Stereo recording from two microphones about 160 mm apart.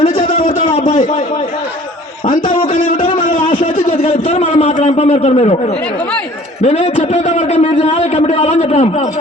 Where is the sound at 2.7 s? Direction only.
55° left (ahead or behind).